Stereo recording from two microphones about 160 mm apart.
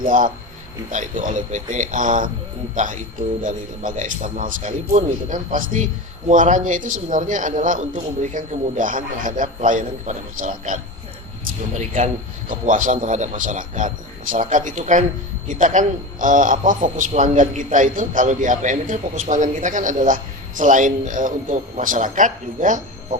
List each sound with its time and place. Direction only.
0.0 s a man's voice: 55° right (ahead or behind)